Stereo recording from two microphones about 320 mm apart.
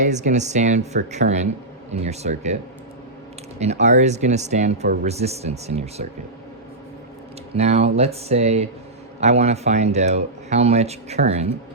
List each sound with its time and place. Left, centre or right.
0.0 s speech: right
3.6 s speech: right
7.5 s speech: centre